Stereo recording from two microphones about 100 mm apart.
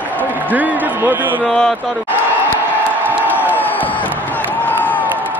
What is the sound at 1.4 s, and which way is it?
Speech, 5° left (ahead or behind).